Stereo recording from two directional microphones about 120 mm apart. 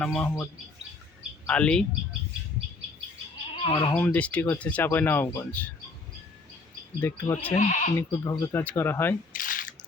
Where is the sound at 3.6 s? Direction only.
40° left (ahead or behind).